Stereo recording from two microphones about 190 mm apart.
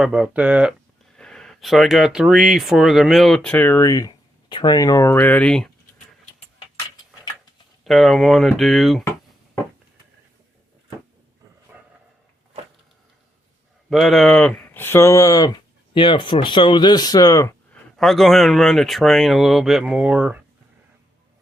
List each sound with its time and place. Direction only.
0.0 s speech: 5° right (ahead or behind)
7.9 s speech: centre (ahead or behind)
13.9 s speech: centre (ahead or behind); by 17.5 s 20° left (ahead or behind)
17.9 s speech: centre (ahead or behind)